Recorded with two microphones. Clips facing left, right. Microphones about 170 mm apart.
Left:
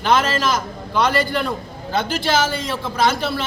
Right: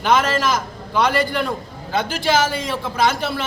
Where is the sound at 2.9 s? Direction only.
10° right (ahead or behind).